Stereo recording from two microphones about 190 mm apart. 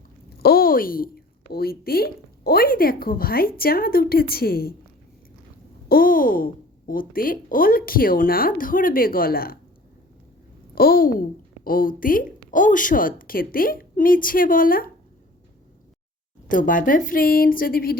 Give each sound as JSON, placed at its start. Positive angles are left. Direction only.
{"t": 0.4, "sound": "a woman's voice", "side_deg": 50}
{"t": 5.9, "sound": "a woman's voice", "side_deg": 50}
{"t": 10.8, "sound": "a woman's voice", "side_deg": 50}
{"t": 16.5, "sound": "a woman's voice", "side_deg": 45}